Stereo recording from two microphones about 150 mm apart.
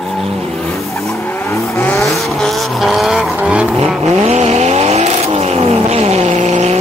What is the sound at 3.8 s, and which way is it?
Vehicle, 45° right (ahead or behind).